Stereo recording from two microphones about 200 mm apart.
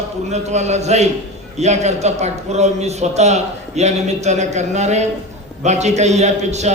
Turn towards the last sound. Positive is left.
turn(degrees=-35)  # may be behind; listen again after turning